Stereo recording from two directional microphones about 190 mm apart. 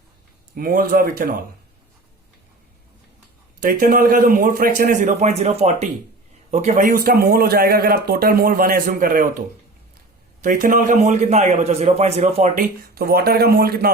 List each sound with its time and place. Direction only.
0.5 s a man's voice: 50° right (ahead or behind)
3.6 s a man's voice: 50° right (ahead or behind)
10.4 s a man's voice: 45° right (ahead or behind)